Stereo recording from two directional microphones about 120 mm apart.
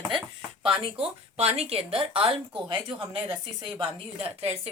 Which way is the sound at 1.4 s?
55° right (ahead or behind).